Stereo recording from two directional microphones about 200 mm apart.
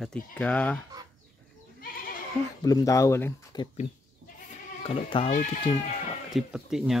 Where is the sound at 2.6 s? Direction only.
15° left (ahead or behind).